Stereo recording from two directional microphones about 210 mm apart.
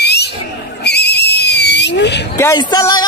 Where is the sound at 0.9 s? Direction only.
50° left (ahead or behind).